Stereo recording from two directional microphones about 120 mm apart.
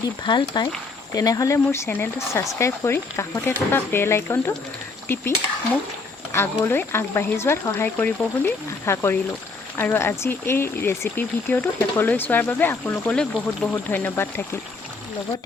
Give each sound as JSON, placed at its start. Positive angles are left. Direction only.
{"t": 0.0, "sound": "speech", "side_deg": 40}
{"t": 6.3, "sound": "speech", "side_deg": 20}